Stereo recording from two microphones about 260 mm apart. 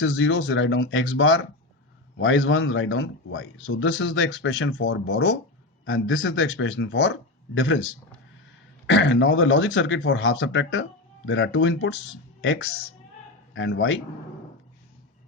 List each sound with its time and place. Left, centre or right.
0.0 s a man's voice: left
8.9 s a man's voice: left
13.5 s a man's voice: left